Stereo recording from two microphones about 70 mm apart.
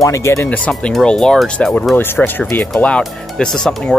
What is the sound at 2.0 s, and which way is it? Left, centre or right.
Speech, left.